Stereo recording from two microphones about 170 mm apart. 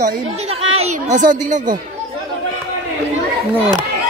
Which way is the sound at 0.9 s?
50° right (ahead or behind).